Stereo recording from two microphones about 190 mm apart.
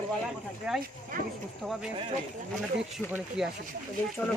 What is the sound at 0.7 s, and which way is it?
Speech, 5° right (ahead or behind).